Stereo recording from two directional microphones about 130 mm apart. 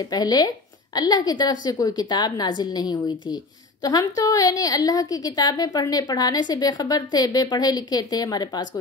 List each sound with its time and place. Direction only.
0.0 s a woman's voice: 30° left (ahead or behind)